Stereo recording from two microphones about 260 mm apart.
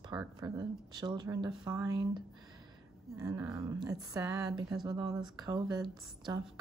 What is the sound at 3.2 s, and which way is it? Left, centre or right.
Speech, centre.